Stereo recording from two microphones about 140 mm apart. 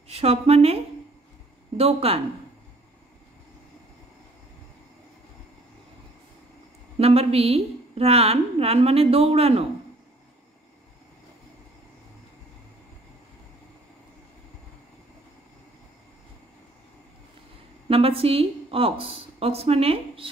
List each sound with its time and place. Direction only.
0.1 s a woman's voice: 45° right (ahead or behind)
7.0 s a woman's voice: 45° right (ahead or behind)
17.8 s a woman's voice: 45° right (ahead or behind)